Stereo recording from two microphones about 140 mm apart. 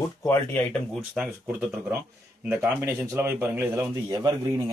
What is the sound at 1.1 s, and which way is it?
A man's voice, 10° right (ahead or behind).